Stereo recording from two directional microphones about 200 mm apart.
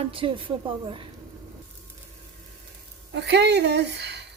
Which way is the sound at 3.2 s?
60° right (ahead or behind).